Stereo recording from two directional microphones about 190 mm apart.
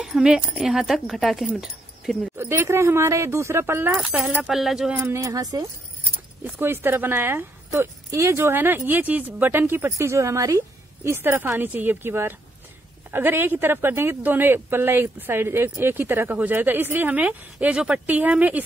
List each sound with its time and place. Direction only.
0.0 s speech: 5° right (ahead or behind)
5.0 s speech: 15° right (ahead or behind)